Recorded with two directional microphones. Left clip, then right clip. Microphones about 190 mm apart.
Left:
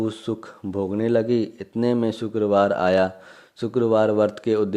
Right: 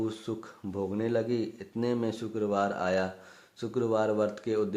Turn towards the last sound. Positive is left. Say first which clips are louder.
# left 9 dB
turn(degrees=40)  # may be behind; listen again after turning